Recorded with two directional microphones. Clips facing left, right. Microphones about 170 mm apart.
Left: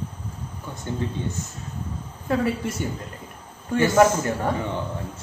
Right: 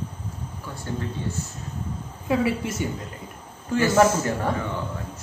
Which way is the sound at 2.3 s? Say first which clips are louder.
Even; 5° right (ahead or behind).